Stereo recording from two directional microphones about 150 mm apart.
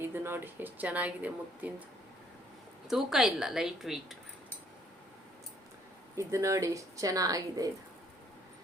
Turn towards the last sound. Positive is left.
turn(degrees=-25)  # may be behind; listen again after turning